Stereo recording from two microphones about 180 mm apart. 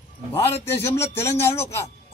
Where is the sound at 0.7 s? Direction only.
15° left (ahead or behind).